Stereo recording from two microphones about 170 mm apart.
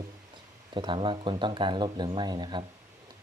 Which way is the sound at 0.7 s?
30° right (ahead or behind).